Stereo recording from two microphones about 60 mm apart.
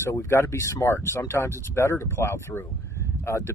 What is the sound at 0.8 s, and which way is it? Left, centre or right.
Speech, left.